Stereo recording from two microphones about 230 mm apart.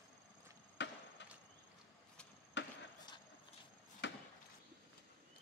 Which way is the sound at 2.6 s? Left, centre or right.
Left.